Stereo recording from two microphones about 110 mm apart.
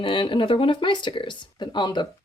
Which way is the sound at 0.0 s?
50° left (ahead or behind).